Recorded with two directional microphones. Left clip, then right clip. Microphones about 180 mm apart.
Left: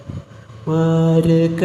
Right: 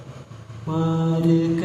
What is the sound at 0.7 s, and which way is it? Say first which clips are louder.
Mantra: left 8 dB; 30° left (ahead or behind).